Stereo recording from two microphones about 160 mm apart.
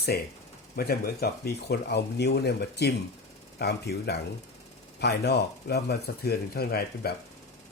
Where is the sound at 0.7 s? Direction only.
70° left (ahead or behind).